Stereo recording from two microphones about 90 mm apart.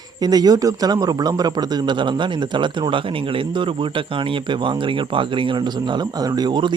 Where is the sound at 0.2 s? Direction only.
45° right (ahead or behind).